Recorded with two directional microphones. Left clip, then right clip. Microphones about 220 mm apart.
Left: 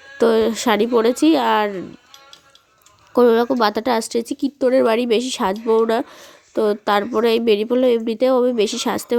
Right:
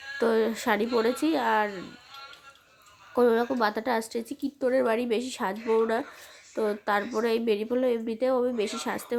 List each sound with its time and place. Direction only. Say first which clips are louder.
0.2 s speech: left 9 dB; 30° left (ahead or behind)
3.1 s a woman's voice: left 9 dB; 30° left (ahead or behind)